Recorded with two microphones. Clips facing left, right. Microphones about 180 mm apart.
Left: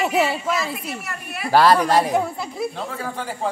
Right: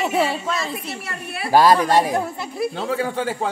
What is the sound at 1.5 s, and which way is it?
Speech, 10° right (ahead or behind).